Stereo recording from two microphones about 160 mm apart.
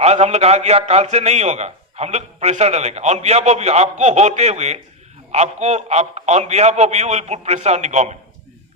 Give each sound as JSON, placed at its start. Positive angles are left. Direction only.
{"t": 0.0, "sound": "a man's voice", "side_deg": -40}